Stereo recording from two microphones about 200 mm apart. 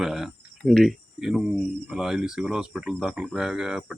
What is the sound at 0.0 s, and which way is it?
Speech, centre (ahead or behind).